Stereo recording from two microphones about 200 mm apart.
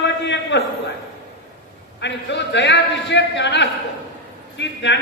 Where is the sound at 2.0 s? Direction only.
60° left (ahead or behind).